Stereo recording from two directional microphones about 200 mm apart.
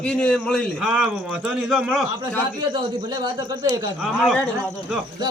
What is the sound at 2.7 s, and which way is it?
A man's voice, 20° right (ahead or behind).